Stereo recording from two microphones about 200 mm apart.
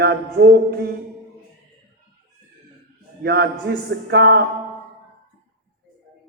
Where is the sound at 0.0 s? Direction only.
55° right (ahead or behind).